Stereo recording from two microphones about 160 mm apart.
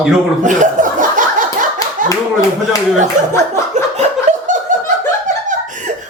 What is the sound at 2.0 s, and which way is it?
Clapping, 55° right (ahead or behind).